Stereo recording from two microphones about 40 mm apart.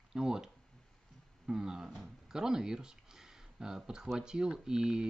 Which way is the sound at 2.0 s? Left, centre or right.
Centre.